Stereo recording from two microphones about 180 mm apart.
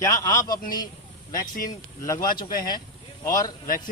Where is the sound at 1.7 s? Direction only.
20° left (ahead or behind).